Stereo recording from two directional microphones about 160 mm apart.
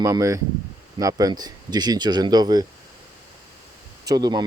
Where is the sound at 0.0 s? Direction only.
20° right (ahead or behind).